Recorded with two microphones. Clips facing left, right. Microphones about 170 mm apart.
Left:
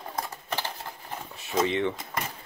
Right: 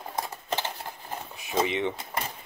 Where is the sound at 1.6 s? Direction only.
15° right (ahead or behind).